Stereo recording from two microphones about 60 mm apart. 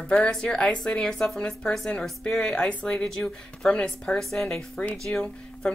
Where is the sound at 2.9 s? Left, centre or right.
Centre.